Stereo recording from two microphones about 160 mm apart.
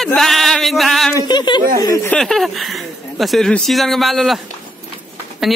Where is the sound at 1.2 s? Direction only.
25° left (ahead or behind).